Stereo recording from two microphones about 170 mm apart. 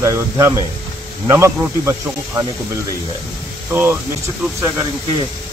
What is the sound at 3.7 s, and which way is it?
Speech, 15° right (ahead or behind).